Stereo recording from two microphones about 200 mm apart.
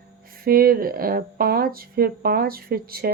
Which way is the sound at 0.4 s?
45° right (ahead or behind).